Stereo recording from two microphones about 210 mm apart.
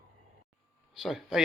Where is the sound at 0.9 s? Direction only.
Centre (ahead or behind).